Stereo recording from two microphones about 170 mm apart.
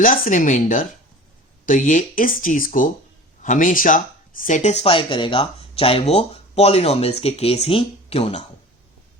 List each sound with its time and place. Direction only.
0.0 s speech: 50° left (ahead or behind)